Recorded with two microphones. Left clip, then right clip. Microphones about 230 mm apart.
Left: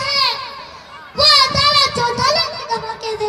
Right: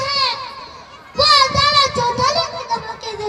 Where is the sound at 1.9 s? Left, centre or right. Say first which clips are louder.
Left 1 dB; left.